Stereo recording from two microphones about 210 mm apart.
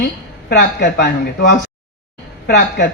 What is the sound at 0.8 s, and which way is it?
Speech, 55° left (ahead or behind).